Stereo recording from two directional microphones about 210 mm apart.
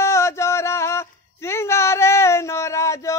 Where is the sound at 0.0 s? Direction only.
15° left (ahead or behind).